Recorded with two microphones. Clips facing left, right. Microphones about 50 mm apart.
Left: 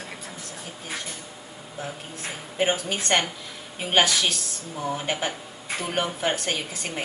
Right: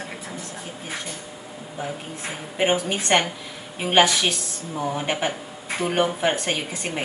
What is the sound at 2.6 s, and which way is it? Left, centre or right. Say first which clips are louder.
A woman's voice: right 3 dB; right.